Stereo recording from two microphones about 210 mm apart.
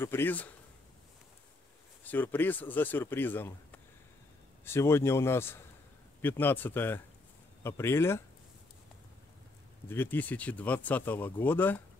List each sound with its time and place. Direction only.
0.0 s speech: 10° left (ahead or behind)
2.0 s speech: 10° left (ahead or behind)
9.8 s speech: 10° left (ahead or behind)